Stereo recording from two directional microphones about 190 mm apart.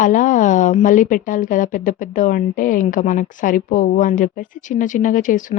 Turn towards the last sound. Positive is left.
turn(degrees=45)  # may be behind; listen again after turning